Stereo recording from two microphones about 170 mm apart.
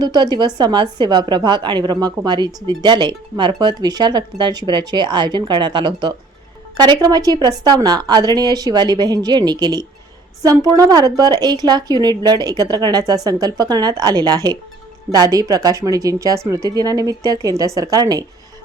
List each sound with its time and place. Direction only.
0.0 s speech: 25° right (ahead or behind)